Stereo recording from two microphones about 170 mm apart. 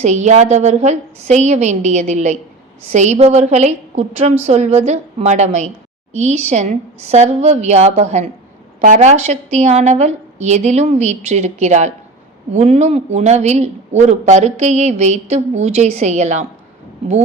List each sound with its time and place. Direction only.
0.0 s a woman's voice: 45° right (ahead or behind)